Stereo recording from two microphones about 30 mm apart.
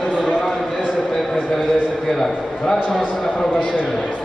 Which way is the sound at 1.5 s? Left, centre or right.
Centre.